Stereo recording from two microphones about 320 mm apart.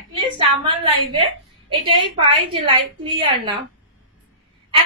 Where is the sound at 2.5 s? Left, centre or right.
Centre.